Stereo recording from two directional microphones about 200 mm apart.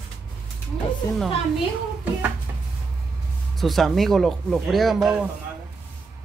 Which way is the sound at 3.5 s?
Centre (ahead or behind).